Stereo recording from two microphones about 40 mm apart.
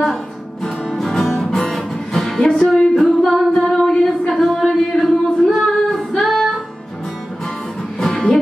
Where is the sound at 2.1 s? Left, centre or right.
Centre.